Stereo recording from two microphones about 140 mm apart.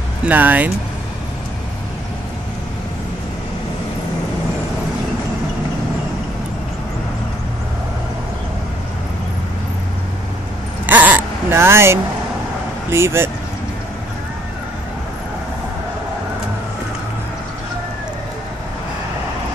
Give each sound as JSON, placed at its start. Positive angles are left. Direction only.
{"t": 0.2, "sound": "speech", "side_deg": -10}
{"t": 10.9, "sound": "a sound", "side_deg": -10}
{"t": 12.9, "sound": "speech", "side_deg": -20}